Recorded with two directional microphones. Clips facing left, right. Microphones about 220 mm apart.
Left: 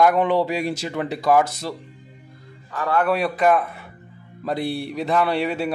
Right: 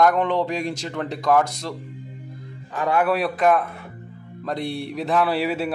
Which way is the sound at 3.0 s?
Centre (ahead or behind).